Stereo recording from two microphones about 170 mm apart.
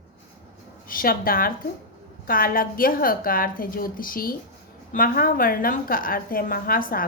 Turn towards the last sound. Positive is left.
turn(degrees=55)  # may be behind; listen again after turning